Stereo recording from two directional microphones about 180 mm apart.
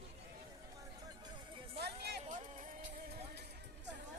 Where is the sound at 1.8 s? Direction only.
60° right (ahead or behind).